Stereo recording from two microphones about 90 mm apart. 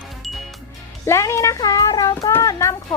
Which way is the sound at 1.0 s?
30° left (ahead or behind).